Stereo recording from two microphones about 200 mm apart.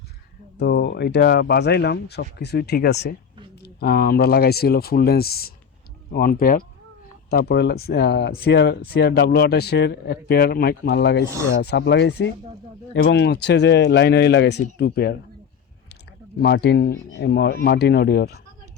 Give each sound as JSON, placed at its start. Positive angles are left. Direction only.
{"t": 0.6, "sound": "speech", "side_deg": 55}
{"t": 16.4, "sound": "speech", "side_deg": 55}